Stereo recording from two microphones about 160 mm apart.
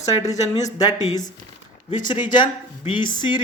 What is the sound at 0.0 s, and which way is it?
Speech, 20° left (ahead or behind).